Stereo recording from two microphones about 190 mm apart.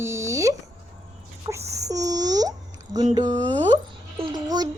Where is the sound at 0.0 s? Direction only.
15° right (ahead or behind).